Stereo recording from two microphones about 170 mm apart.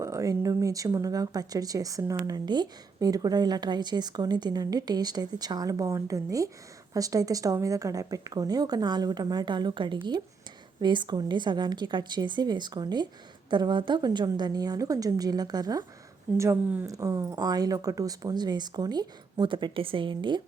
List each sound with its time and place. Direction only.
0.0 s speech: 20° right (ahead or behind)
16.4 s speech: 10° right (ahead or behind); by 20.4 s 30° right (ahead or behind)